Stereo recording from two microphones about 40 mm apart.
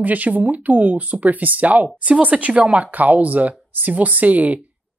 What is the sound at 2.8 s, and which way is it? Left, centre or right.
Speech, right.